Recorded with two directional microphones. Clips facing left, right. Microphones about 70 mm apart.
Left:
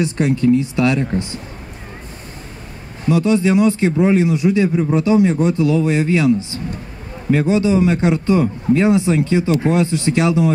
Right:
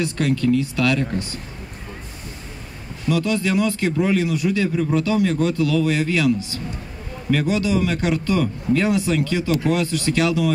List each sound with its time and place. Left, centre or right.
0.0 s a man's voice: left
3.1 s a man's voice: left